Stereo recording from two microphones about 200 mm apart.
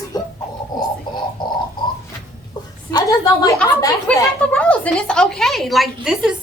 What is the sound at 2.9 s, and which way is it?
Speech, 20° left (ahead or behind).